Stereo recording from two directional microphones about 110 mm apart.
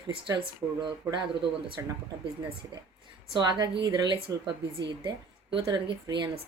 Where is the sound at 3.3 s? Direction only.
40° right (ahead or behind).